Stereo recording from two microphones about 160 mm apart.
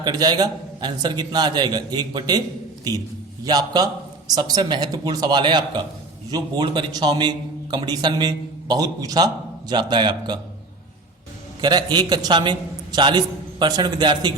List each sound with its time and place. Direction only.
0.0 s a man's voice: 25° right (ahead or behind)
3.4 s a man's voice: 25° right (ahead or behind)
11.6 s a man's voice: 25° right (ahead or behind)